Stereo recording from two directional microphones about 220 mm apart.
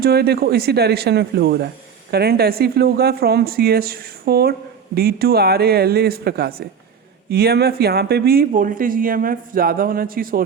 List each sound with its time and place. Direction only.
0.0 s speech: 45° right (ahead or behind)